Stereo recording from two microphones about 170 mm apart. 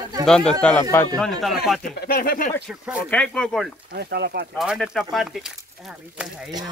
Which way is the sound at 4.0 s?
70° right (ahead or behind).